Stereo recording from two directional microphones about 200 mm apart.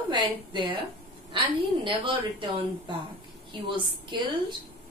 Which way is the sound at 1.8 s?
25° right (ahead or behind).